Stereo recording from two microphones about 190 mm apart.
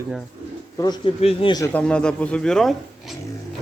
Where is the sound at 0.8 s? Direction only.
25° left (ahead or behind).